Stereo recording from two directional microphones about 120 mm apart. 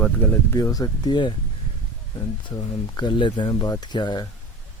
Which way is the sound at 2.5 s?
40° left (ahead or behind).